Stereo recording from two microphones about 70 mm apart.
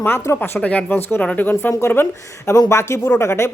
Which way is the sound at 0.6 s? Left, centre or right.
Centre.